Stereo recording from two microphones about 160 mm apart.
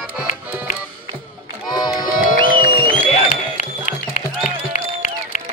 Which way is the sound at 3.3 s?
50° left (ahead or behind).